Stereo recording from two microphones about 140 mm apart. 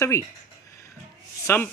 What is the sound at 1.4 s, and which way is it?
Speech, 15° left (ahead or behind).